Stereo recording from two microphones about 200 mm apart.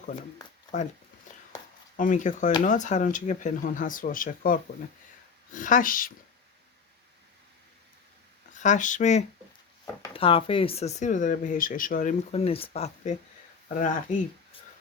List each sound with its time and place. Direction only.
2.0 s speech: 40° left (ahead or behind)
8.5 s speech: 35° left (ahead or behind)
9.8 s speech: 20° left (ahead or behind); by 14.3 s 40° left (ahead or behind)